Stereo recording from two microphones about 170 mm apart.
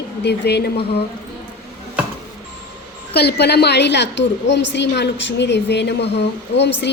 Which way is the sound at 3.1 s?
75° left (ahead or behind).